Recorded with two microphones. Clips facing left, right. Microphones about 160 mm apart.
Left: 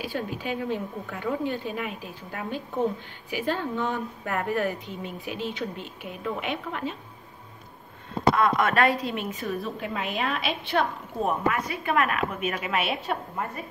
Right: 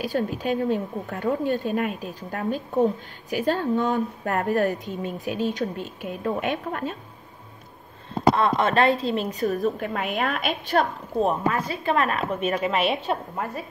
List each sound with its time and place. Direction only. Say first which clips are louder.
0.0 s a woman's voice: right 6 dB; 45° right (ahead or behind)
8.1 s a woman's voice: right 2 dB; 30° right (ahead or behind); by 10.9 s 45° right (ahead or behind)
11.2 s a woman's voice: left 1 dB; 30° right (ahead or behind)